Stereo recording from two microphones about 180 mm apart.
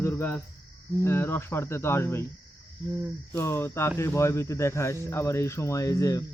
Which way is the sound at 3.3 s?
15° left (ahead or behind).